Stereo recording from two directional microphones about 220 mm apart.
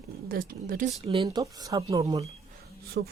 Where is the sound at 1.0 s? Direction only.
20° right (ahead or behind).